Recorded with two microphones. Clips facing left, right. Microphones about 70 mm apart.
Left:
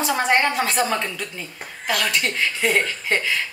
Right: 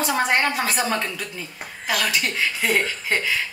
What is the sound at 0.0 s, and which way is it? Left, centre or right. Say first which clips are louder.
Speech: left 1 dB; centre.